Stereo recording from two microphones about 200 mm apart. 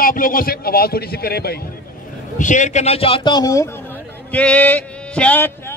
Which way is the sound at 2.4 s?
40° left (ahead or behind).